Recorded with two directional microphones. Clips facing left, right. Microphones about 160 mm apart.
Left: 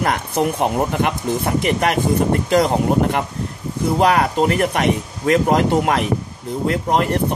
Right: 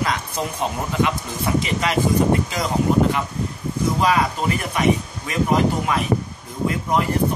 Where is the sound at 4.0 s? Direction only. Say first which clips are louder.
Left 6 dB; 60° left (ahead or behind).